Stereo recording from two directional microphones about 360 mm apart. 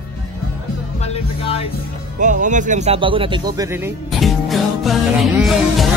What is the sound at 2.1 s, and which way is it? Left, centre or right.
Speech, right.